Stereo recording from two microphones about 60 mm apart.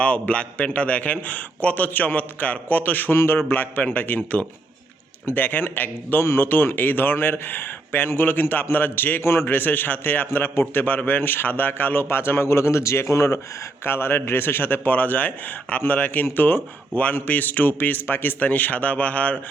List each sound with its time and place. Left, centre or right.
0.0 s a man's voice: left
13.8 s a man's voice: left